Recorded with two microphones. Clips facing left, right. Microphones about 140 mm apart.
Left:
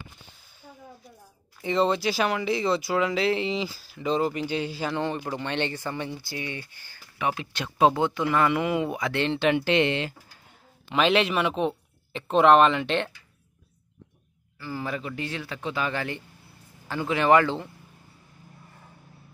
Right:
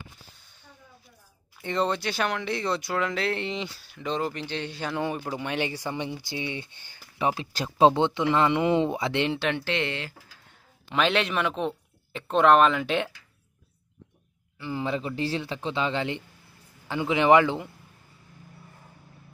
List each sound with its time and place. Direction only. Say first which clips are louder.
1.6 s speech: left 3 dB; centre (ahead or behind)
5.0 s speech: left 1 dB; 5° right (ahead or behind); by 9.2 s 25° right (ahead or behind)
9.6 s speech: left 6 dB; 20° left (ahead or behind)
10.9 s speech: left 3 dB; centre (ahead or behind)
14.6 s speech: right 3 dB; 20° right (ahead or behind)